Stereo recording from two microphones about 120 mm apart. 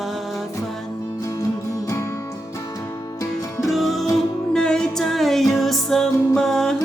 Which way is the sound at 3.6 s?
Centre (ahead or behind).